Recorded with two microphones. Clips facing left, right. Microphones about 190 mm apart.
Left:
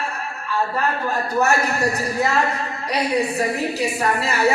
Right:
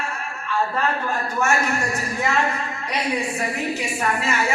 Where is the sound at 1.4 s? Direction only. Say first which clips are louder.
Left 3 dB; 35° left (ahead or behind).